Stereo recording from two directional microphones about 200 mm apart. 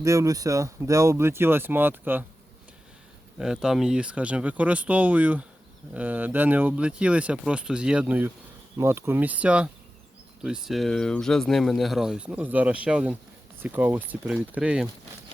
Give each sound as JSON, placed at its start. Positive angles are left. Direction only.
{"t": 0.0, "sound": "speech", "side_deg": -15}
{"t": 3.3, "sound": "speech", "side_deg": -5}